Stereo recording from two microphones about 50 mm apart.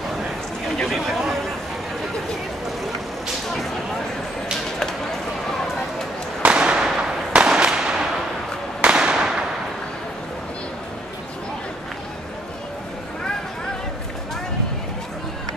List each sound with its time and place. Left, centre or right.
0.8 s speech: centre
6.4 s fireworks: centre
8.8 s a sound: centre